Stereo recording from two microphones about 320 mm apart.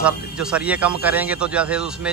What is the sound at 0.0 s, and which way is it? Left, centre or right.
Speech, centre.